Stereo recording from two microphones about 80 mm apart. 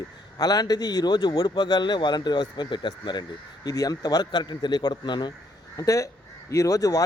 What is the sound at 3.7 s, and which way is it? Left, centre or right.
Speech, left.